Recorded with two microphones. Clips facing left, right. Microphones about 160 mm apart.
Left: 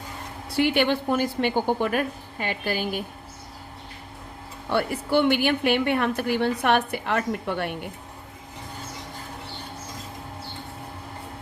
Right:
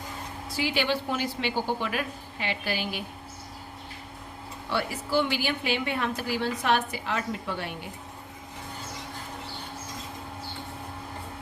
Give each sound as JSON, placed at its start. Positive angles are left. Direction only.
{"t": 0.5, "sound": "a woman's voice", "side_deg": 60}
{"t": 4.7, "sound": "a woman's voice", "side_deg": 55}